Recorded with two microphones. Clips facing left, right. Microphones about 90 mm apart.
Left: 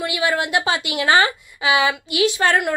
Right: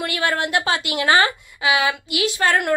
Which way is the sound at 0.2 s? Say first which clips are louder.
Left 1 dB; 20° left (ahead or behind).